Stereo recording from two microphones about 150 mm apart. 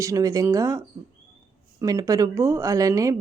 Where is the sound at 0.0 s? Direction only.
20° right (ahead or behind).